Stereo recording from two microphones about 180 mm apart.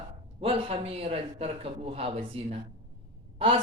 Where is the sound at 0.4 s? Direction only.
30° right (ahead or behind).